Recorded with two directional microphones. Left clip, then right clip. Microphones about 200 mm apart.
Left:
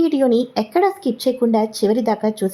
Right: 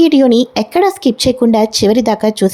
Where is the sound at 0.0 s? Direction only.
30° right (ahead or behind).